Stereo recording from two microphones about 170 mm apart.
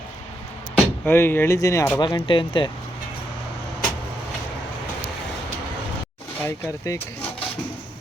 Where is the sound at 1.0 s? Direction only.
10° left (ahead or behind); by 2.6 s 30° left (ahead or behind).